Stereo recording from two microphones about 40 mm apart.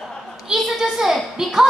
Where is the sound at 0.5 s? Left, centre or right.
Centre.